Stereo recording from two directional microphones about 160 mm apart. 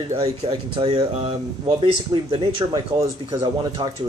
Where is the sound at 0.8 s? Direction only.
30° right (ahead or behind).